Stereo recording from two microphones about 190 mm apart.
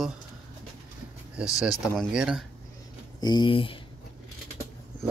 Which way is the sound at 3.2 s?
25° left (ahead or behind).